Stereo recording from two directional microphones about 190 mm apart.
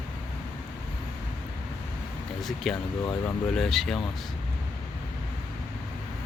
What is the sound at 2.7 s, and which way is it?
Speech, centre (ahead or behind).